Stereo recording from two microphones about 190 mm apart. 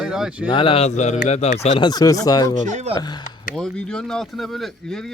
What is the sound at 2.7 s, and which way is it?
Speech, 40° right (ahead or behind).